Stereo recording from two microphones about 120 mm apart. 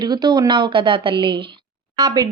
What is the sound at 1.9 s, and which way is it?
Speech, 30° right (ahead or behind).